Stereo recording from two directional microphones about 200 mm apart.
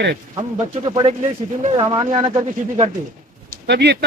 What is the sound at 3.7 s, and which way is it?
Speech, 60° right (ahead or behind).